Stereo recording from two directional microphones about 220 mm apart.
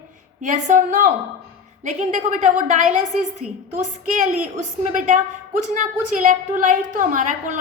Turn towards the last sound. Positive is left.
turn(degrees=-35)  # may be behind; listen again after turning